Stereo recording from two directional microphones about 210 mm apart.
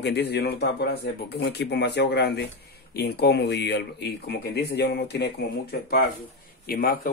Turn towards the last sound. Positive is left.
turn(degrees=45)  # may be behind; listen again after turning